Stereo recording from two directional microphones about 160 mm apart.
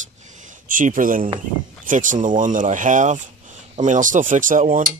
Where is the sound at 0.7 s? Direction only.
55° right (ahead or behind).